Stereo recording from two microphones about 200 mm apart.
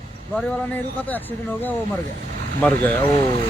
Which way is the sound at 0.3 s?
10° left (ahead or behind).